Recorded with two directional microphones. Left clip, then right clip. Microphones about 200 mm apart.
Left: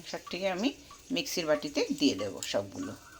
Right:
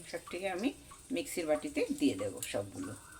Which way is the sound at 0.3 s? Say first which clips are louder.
Left 5 dB; 15° left (ahead or behind).